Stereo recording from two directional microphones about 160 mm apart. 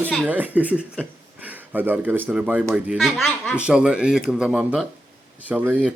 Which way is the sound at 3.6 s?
5° right (ahead or behind).